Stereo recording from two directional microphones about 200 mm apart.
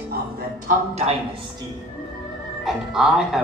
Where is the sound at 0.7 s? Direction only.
35° right (ahead or behind).